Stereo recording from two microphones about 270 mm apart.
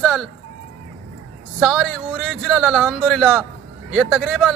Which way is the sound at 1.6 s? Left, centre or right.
Centre.